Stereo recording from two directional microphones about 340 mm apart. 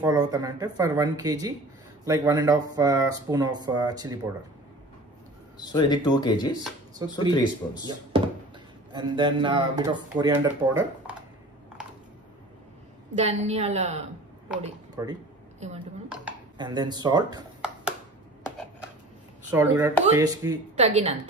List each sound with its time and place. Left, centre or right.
0.0 s speech: centre
5.6 s speech: centre
8.9 s speech: centre
13.1 s a woman's voice: centre
16.1 s a sound: centre
19.5 s a woman's voice: centre